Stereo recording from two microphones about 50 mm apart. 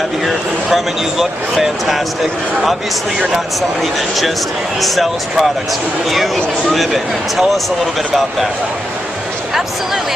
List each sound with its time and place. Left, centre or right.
0.2 s speech: centre
4.8 s speech: centre